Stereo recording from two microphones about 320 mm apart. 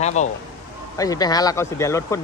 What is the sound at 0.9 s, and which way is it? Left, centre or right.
Speech, centre.